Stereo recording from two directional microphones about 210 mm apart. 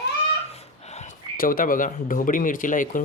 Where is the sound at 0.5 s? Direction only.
30° left (ahead or behind).